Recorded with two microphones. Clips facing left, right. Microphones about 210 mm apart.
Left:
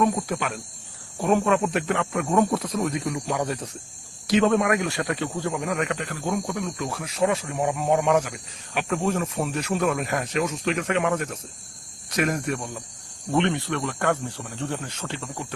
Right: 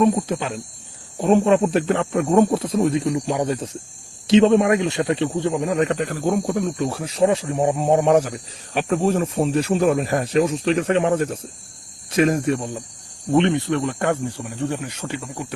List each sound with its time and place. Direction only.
0.0 s a man's voice: 20° right (ahead or behind)